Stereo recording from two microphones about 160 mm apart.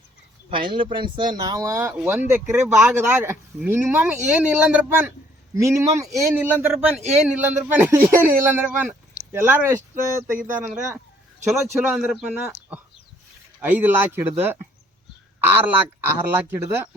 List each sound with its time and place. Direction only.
0.5 s a man's voice: 30° right (ahead or behind); by 12.5 s 10° right (ahead or behind)
13.6 s speech: 10° right (ahead or behind)